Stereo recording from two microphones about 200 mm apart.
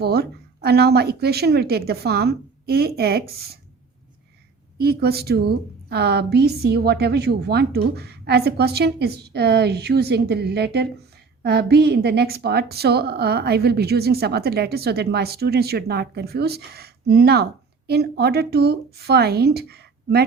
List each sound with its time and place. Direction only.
0.0 s a woman's voice: 50° right (ahead or behind)
4.8 s a woman's voice: 50° right (ahead or behind)